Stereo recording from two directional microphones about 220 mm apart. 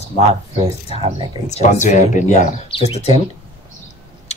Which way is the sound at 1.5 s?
35° left (ahead or behind).